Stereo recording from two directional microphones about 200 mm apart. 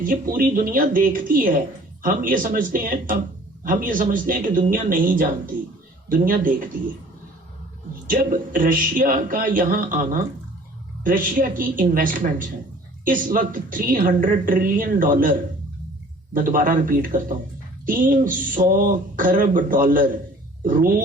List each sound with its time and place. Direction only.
0.0 s speech: 45° right (ahead or behind)
8.0 s speech: 45° right (ahead or behind)